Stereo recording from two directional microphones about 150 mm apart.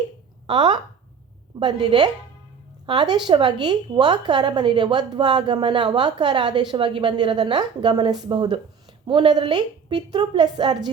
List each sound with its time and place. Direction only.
0.4 s a woman's voice: 30° right (ahead or behind)